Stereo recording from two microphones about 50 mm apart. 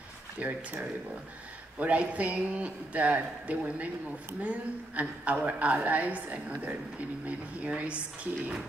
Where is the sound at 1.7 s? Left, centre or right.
Right.